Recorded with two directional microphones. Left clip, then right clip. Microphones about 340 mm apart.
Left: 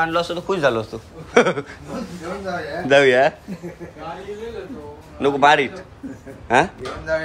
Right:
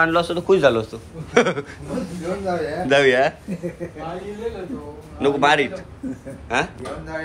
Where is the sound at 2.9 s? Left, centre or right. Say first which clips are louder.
Left 2 dB; centre.